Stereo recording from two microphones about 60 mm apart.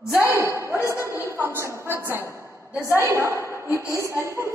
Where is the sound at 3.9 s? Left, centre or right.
Right.